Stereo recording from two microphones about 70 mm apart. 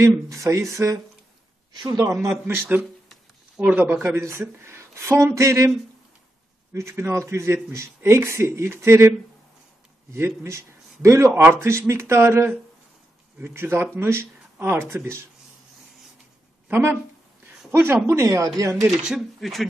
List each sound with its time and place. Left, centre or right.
0.0 s speech: right
1.8 s speech: right
2.4 s speech: right
3.8 s speech: right
6.7 s speech: right
10.1 s a man's voice: right
13.6 s speech: right
16.6 s speech: right
18.9 s speech: centre